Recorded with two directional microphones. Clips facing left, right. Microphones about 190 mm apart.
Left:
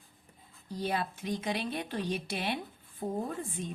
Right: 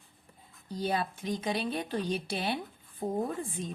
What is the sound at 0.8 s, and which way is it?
Speech, 30° right (ahead or behind).